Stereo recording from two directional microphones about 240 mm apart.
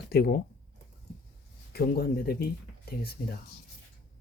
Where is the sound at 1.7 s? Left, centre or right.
Left.